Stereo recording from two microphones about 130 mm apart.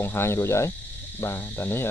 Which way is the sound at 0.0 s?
20° left (ahead or behind).